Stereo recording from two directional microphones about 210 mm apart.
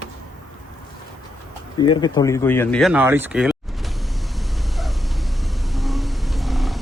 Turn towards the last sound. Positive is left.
turn(degrees=0)  # may be behind; listen again after turning